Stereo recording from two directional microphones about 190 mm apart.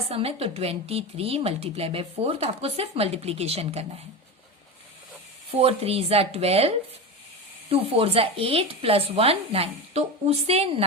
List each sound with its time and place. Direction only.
0.1 s a woman's voice: 30° right (ahead or behind)
5.5 s a woman's voice: 30° right (ahead or behind)